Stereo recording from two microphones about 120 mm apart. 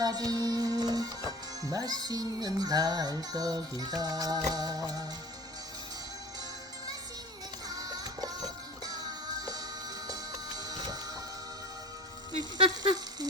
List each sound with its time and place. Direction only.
0.0 s music: 30° right (ahead or behind)
7.7 s music: 30° right (ahead or behind)
12.5 s a sound: 40° right (ahead or behind)